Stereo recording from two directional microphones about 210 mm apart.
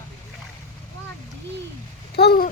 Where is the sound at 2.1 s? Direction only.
50° left (ahead or behind).